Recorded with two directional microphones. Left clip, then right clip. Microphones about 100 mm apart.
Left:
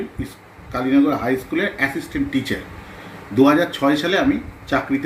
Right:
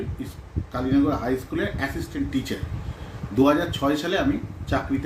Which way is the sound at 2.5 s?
25° right (ahead or behind).